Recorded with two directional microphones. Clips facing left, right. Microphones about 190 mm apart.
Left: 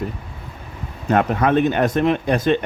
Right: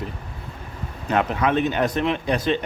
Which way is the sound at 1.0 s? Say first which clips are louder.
Left 4 dB; 50° left (ahead or behind).